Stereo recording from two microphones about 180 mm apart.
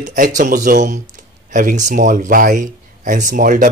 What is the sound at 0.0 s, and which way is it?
Speech, 45° right (ahead or behind).